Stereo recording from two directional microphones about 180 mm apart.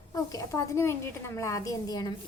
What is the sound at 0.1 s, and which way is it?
A woman's voice, 20° left (ahead or behind).